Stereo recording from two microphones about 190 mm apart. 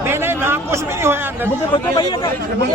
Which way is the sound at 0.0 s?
10° right (ahead or behind).